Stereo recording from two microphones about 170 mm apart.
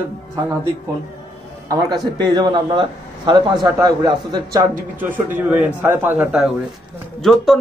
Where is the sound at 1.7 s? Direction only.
20° right (ahead or behind).